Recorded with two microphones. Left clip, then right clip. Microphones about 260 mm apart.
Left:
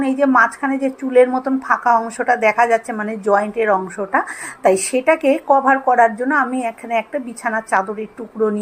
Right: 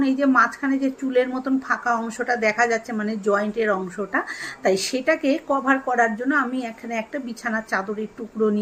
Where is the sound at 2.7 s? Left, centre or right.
Centre.